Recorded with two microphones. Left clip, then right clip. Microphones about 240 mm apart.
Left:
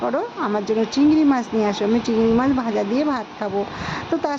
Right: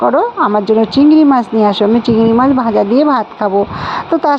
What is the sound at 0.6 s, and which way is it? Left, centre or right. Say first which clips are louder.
Speech: right 6 dB; centre.